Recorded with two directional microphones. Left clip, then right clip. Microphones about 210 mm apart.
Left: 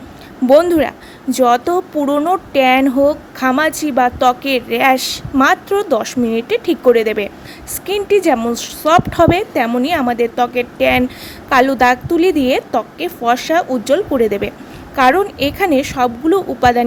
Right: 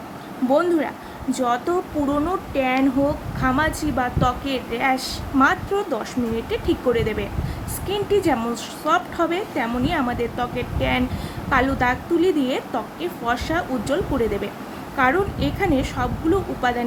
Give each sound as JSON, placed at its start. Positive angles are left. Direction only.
{"t": 0.5, "sound": "speech", "side_deg": 45}